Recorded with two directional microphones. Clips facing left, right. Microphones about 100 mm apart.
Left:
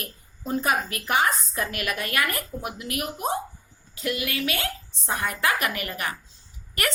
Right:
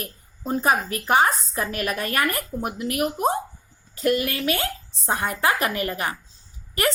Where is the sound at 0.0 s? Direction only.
35° right (ahead or behind).